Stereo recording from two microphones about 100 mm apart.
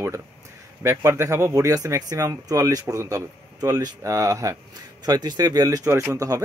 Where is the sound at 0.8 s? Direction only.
30° right (ahead or behind).